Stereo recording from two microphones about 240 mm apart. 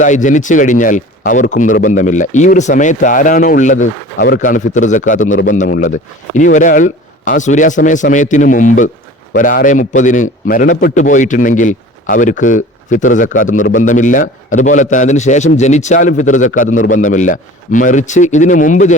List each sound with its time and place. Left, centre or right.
0.0 s a man's voice: left